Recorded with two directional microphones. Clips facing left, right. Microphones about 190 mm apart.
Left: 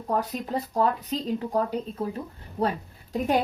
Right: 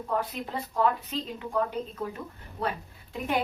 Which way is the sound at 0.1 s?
40° left (ahead or behind).